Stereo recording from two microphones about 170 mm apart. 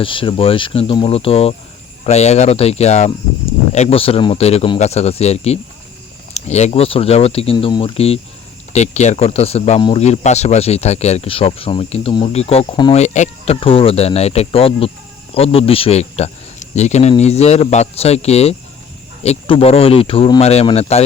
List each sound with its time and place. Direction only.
0.0 s speech: 30° left (ahead or behind)
12.9 s speech: 40° left (ahead or behind)